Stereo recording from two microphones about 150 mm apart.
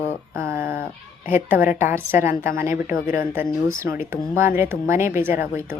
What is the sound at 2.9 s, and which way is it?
Speech, 70° left (ahead or behind).